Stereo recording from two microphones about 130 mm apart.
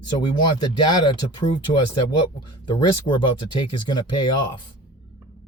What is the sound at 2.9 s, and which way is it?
Speech, 35° left (ahead or behind).